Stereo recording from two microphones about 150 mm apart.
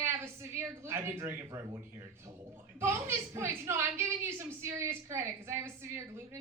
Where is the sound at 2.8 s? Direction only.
15° right (ahead or behind).